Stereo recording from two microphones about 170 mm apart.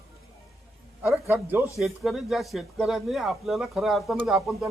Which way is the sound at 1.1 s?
15° right (ahead or behind).